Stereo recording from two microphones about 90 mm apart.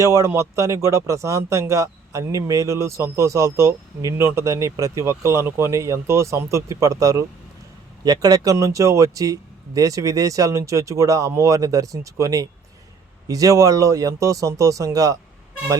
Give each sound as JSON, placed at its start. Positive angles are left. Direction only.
{"t": 0.0, "sound": "speech", "side_deg": -40}